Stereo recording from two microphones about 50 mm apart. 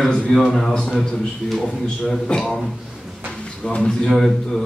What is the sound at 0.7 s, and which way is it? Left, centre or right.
Speech, centre.